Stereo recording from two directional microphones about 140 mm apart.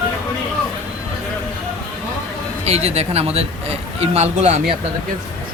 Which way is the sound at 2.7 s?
50° right (ahead or behind).